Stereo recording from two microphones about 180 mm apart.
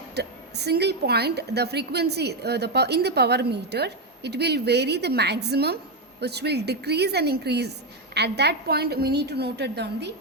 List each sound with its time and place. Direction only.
0.1 s a woman's voice: 65° right (ahead or behind)